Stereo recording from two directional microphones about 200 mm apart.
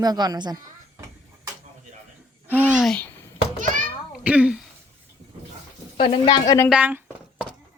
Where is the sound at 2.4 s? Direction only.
10° right (ahead or behind).